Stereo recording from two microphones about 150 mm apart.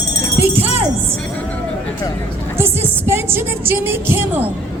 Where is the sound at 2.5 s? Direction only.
15° right (ahead or behind).